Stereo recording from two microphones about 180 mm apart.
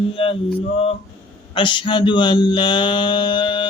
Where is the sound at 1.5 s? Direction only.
25° left (ahead or behind).